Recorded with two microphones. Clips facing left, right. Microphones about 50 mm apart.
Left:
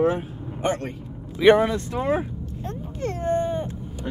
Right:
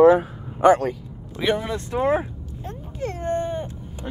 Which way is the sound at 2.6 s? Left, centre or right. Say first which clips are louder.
Even; centre.